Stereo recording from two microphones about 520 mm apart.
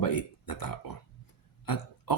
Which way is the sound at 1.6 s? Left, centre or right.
Left.